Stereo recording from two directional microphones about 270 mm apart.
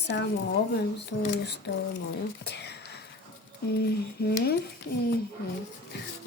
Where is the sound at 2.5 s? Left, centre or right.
Left.